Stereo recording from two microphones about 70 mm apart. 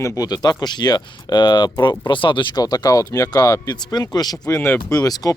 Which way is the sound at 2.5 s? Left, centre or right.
Left.